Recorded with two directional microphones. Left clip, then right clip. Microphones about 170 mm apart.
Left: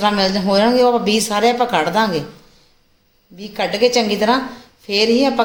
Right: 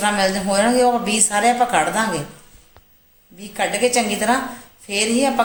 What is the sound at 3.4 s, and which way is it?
A woman's voice, 55° left (ahead or behind).